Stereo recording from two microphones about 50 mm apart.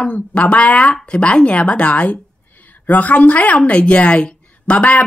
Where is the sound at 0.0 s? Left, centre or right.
Left.